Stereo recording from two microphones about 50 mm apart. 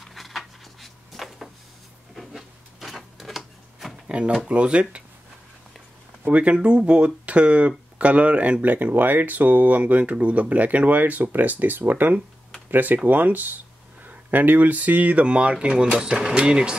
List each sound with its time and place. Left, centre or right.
0.0 s a sound: centre
2.1 s printer: centre
4.1 s speech: right
6.3 s speech: right